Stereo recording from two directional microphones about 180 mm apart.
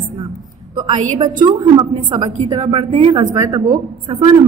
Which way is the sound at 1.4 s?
25° right (ahead or behind).